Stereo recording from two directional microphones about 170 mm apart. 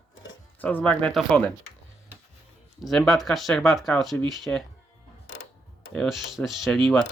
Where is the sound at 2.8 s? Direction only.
Centre (ahead or behind).